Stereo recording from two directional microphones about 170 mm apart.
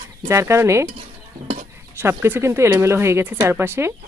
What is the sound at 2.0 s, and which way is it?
Speech, 15° right (ahead or behind).